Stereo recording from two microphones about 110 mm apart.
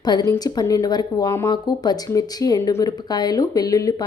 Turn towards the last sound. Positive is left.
turn(degrees=30)  # may be behind; listen again after turning